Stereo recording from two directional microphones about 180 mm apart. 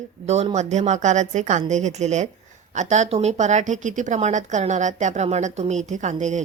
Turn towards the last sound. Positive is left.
turn(degrees=-40)  # may be behind; listen again after turning